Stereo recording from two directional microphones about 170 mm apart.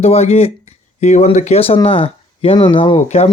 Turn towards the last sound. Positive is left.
turn(degrees=35)  # may be behind; listen again after turning